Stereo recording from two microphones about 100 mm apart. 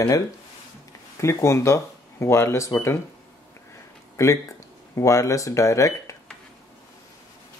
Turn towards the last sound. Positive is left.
turn(degrees=30)  # may be behind; listen again after turning